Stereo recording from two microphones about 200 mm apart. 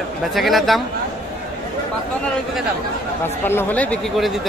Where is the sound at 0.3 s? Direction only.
Centre (ahead or behind).